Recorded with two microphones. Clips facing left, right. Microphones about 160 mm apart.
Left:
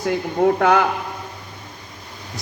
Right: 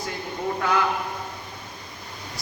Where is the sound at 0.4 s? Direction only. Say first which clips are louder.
Left 8 dB; 65° left (ahead or behind).